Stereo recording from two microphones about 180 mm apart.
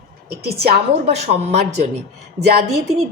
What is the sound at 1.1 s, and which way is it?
Speech, 35° right (ahead or behind).